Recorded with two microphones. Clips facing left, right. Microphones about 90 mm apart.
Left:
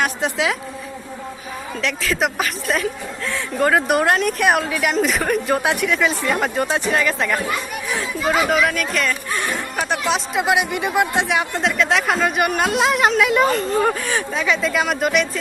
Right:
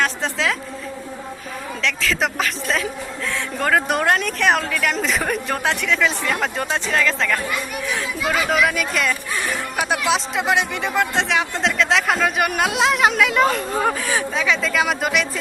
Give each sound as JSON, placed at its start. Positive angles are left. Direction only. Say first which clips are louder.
{"t": 0.0, "sound": "a woman's voice", "louder": "left 1 dB", "side_deg": 15}
{"t": 1.8, "sound": "speech", "louder": "left 1 dB", "side_deg": 5}
{"t": 7.9, "sound": "speech", "louder": "left 3 dB", "side_deg": 0}